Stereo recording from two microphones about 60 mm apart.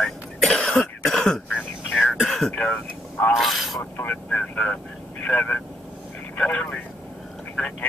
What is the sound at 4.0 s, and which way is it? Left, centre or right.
Speech, left.